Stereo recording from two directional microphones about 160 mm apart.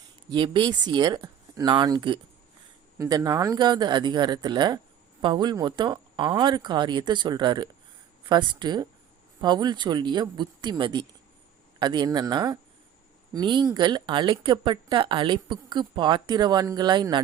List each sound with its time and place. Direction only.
0.3 s speech: 30° right (ahead or behind)